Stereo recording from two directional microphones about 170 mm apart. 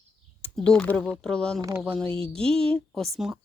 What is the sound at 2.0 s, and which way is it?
Speech, 35° right (ahead or behind).